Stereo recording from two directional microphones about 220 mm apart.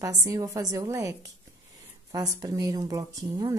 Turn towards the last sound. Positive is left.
turn(degrees=-15)  # may be behind; listen again after turning